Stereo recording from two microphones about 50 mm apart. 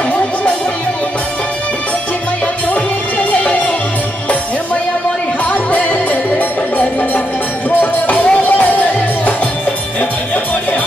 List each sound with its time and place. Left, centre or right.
5.4 s music: left
7.8 s music: left